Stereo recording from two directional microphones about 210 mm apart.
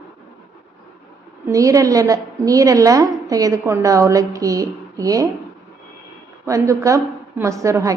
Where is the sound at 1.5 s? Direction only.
15° right (ahead or behind).